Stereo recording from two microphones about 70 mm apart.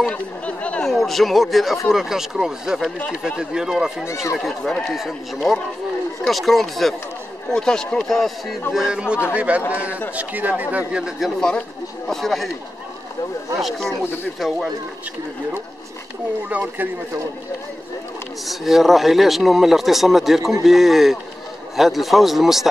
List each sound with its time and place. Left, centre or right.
0.1 s speech: centre
0.8 s a man's voice: centre
4.0 s speech: left
4.9 s speech: centre
8.7 s a man's voice: centre
13.6 s speech: centre
16.4 s speech: right
18.4 s speech: centre